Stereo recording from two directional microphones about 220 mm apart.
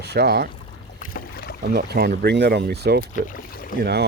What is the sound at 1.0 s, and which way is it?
Boat, 40° left (ahead or behind).